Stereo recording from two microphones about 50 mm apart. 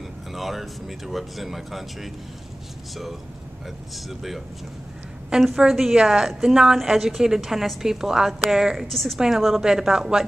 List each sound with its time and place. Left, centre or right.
0.3 s speech: centre
5.6 s a woman's voice: centre
8.7 s a woman's voice: centre